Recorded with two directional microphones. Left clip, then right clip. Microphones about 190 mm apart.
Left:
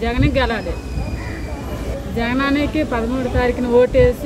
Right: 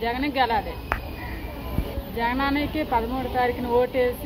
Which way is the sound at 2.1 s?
20° left (ahead or behind).